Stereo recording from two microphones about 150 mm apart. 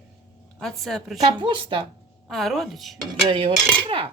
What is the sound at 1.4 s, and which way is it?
Cutlery, 35° right (ahead or behind).